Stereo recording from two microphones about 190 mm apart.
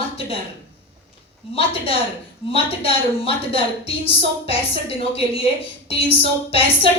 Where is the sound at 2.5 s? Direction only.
30° left (ahead or behind).